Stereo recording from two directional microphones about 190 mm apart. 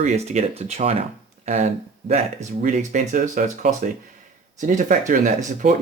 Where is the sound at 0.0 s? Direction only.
35° right (ahead or behind).